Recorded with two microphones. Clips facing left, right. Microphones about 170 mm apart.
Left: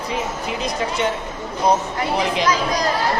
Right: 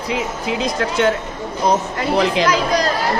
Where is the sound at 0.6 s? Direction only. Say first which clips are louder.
Right 5 dB; 90° right.